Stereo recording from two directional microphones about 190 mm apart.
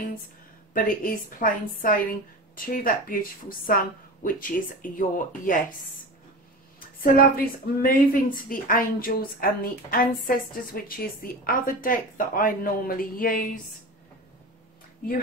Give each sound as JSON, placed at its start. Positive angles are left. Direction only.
{"t": 0.7, "sound": "a woman's voice", "side_deg": 45}
{"t": 7.0, "sound": "a woman's voice", "side_deg": 50}